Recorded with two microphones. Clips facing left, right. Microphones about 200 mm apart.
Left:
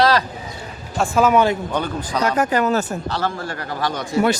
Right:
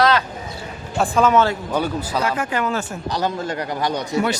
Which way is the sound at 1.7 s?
10° right (ahead or behind).